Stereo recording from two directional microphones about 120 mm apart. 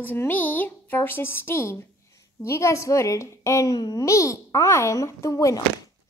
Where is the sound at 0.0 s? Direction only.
15° left (ahead or behind).